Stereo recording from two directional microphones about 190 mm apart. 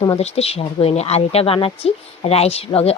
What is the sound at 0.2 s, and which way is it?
Speech, 30° left (ahead or behind).